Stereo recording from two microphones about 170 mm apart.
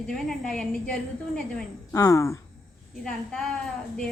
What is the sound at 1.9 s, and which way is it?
Speech, 20° left (ahead or behind).